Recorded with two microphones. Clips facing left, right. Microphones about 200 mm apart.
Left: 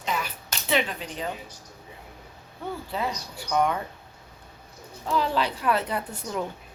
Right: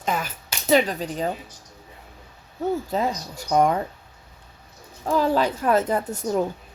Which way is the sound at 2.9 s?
45° right (ahead or behind).